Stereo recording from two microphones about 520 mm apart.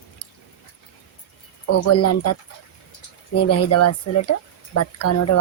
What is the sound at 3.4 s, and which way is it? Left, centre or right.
Speech, left.